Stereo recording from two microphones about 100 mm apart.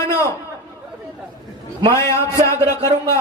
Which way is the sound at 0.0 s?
30° left (ahead or behind).